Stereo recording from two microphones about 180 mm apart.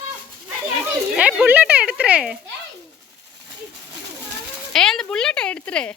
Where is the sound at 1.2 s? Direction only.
5° right (ahead or behind).